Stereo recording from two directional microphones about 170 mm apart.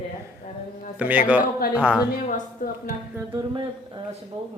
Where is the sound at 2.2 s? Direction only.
50° left (ahead or behind).